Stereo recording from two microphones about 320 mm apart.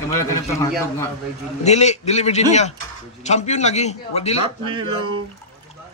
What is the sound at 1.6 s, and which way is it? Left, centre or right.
A man's voice, left.